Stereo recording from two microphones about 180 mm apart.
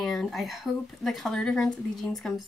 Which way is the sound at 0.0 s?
Centre (ahead or behind).